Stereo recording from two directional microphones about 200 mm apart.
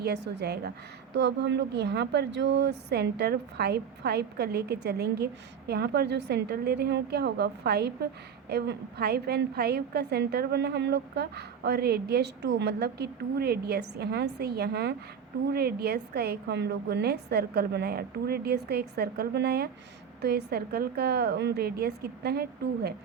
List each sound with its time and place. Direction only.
0.0 s a woman's voice: 55° right (ahead or behind)